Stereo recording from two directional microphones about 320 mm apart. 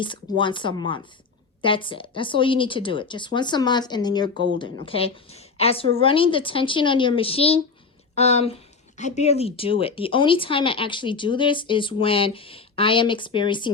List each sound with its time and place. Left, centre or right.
0.0 s speech: centre